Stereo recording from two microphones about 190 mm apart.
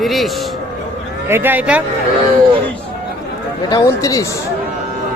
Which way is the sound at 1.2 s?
10° right (ahead or behind).